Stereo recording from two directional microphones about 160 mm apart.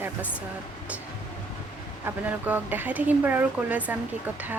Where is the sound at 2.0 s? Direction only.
10° right (ahead or behind).